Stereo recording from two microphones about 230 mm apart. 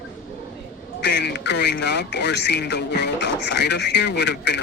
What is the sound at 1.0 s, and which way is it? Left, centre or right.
Speech, left.